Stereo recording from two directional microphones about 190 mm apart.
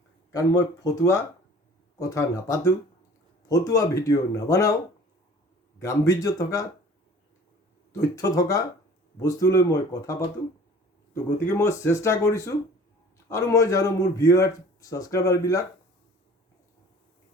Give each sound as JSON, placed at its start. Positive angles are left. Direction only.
{"t": 0.3, "sound": "speech", "side_deg": 15}
{"t": 5.8, "sound": "speech", "side_deg": 15}
{"t": 8.1, "sound": "speech", "side_deg": 20}
{"t": 11.4, "sound": "speech", "side_deg": 15}